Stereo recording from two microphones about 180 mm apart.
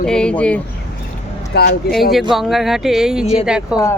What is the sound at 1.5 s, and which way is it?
Speech, 65° left (ahead or behind).